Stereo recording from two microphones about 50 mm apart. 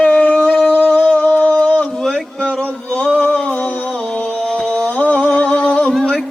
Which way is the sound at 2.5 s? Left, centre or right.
Left.